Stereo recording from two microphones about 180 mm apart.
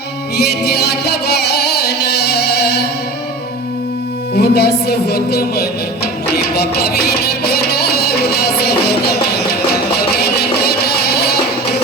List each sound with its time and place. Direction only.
0.3 s speech: 60° left (ahead or behind)
4.4 s speech: 60° left (ahead or behind)
6.3 s music: 60° left (ahead or behind)
10.2 s music: 60° left (ahead or behind)